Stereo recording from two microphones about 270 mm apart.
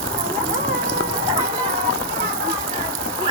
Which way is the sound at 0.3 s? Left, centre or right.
Centre.